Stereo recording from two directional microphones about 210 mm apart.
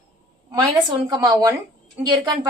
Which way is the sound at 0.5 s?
20° right (ahead or behind).